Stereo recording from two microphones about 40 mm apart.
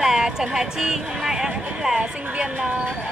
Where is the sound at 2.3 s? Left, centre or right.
Right.